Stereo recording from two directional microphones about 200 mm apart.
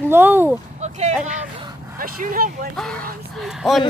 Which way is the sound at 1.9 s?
45° right (ahead or behind).